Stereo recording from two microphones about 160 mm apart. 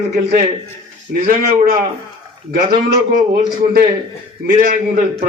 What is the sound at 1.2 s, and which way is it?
A man's voice, 50° right (ahead or behind).